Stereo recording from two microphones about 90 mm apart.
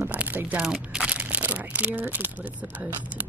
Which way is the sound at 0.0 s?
20° right (ahead or behind).